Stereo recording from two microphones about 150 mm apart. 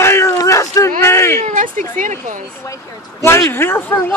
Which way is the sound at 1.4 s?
60° right (ahead or behind).